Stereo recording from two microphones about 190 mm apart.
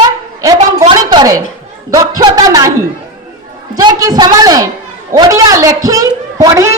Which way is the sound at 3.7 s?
20° right (ahead or behind).